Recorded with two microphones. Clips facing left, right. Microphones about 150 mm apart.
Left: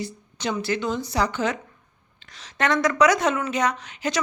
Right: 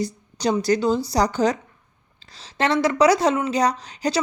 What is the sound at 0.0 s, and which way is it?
Speech, 35° right (ahead or behind).